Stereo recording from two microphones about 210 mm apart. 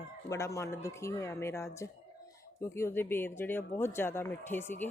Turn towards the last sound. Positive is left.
turn(degrees=10)  # may be behind; listen again after turning